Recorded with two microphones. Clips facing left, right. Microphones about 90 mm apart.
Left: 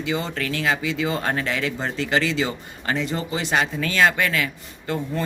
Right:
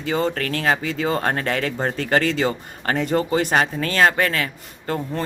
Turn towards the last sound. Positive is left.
turn(degrees=-40)  # may be behind; listen again after turning